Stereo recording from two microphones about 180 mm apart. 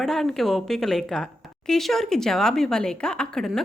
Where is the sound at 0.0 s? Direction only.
Centre (ahead or behind).